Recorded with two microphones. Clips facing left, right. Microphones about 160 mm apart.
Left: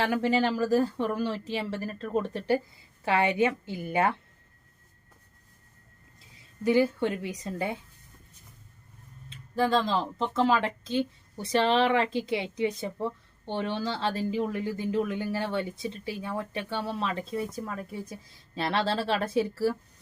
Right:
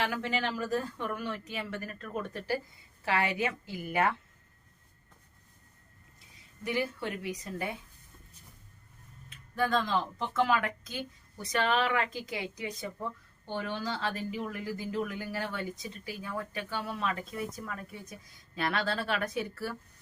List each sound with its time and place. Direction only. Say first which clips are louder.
0.0 s a woman's voice: left 7 dB; 30° left (ahead or behind)
6.3 s speech: left 10 dB; 25° left (ahead or behind)
9.3 s speech: left 4 dB; 30° left (ahead or behind)